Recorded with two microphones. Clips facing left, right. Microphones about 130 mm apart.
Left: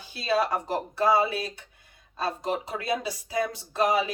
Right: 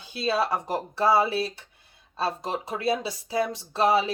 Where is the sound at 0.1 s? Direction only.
25° right (ahead or behind).